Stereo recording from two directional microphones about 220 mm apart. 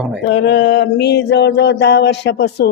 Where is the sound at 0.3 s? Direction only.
50° left (ahead or behind).